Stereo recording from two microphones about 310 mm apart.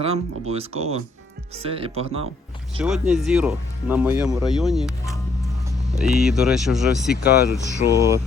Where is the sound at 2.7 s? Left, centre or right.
Centre.